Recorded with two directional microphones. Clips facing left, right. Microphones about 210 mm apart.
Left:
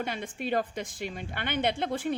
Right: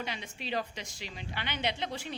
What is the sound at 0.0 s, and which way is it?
A woman's voice, 50° left (ahead or behind).